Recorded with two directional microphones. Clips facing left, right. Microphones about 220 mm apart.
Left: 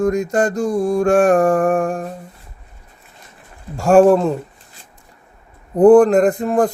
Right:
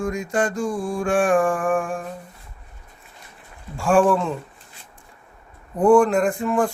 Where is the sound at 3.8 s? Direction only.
40° left (ahead or behind).